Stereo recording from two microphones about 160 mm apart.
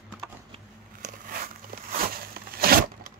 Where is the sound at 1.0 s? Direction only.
60° right (ahead or behind).